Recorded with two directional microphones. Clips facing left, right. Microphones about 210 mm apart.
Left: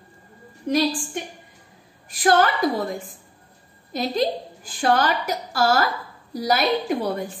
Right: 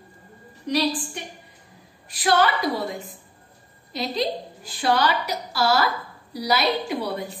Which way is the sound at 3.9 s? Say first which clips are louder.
Left 3 dB; 50° left (ahead or behind).